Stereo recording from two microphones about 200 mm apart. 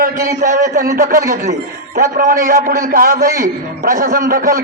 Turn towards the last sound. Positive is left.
turn(degrees=-45)  # may be behind; listen again after turning